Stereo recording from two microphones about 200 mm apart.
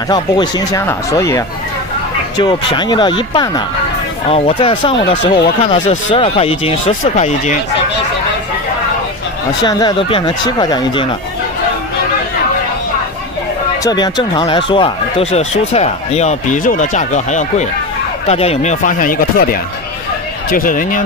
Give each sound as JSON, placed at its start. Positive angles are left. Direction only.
{"t": 0.1, "sound": "speech", "side_deg": 20}
{"t": 9.6, "sound": "speech", "side_deg": 20}
{"t": 13.8, "sound": "speech", "side_deg": 20}